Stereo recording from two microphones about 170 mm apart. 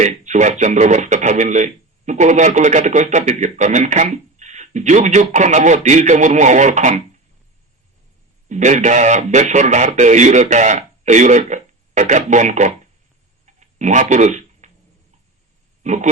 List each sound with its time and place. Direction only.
0.0 s speech: 45° right (ahead or behind)
8.4 s speech: 45° right (ahead or behind)
13.4 s a sound: 45° right (ahead or behind)
15.8 s speech: 45° right (ahead or behind)